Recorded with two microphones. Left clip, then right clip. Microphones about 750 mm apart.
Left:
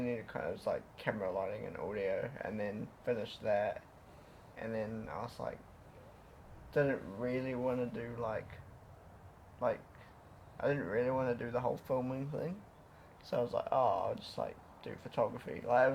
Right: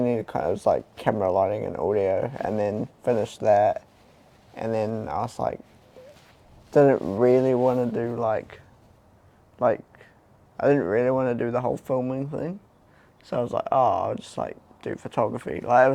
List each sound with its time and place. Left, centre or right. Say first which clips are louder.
0.0 s speech: right 14 dB; right
6.7 s speech: right 16 dB; right
10.6 s speech: right 13 dB; right